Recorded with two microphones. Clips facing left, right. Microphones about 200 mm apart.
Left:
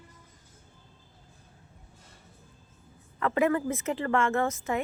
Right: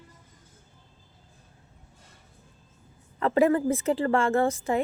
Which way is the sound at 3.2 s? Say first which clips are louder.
Right 4 dB; 30° right (ahead or behind).